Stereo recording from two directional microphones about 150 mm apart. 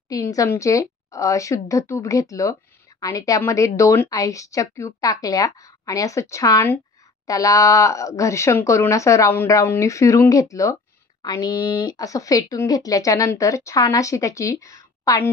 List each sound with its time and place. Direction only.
0.1 s speech: 20° left (ahead or behind)